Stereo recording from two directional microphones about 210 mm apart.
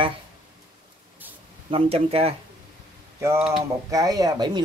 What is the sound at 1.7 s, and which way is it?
Speech, 25° right (ahead or behind).